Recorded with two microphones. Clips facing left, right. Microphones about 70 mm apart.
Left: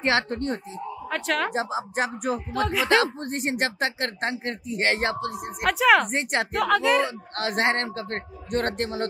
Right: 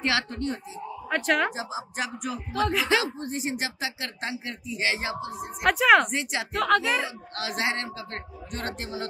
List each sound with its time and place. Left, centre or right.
0.0 s speech: left
1.0 s speech: centre
1.5 s speech: left
2.5 s speech: centre
2.9 s speech: left
5.6 s speech: centre
6.0 s speech: left
6.5 s speech: centre
7.0 s speech: left